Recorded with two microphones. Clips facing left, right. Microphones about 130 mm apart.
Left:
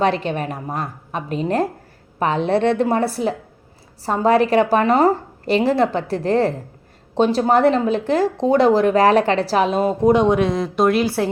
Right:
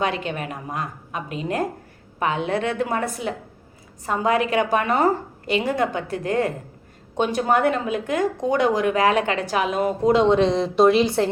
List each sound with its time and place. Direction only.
0.0 s speech: 35° left (ahead or behind)
10.1 s speech: 15° left (ahead or behind)